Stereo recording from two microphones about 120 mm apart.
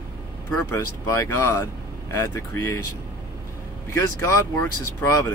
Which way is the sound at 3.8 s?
25° left (ahead or behind).